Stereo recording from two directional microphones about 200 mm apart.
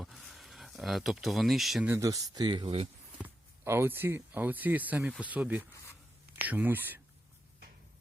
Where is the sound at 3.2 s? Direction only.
10° right (ahead or behind).